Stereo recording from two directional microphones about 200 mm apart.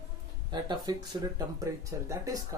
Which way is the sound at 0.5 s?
20° right (ahead or behind).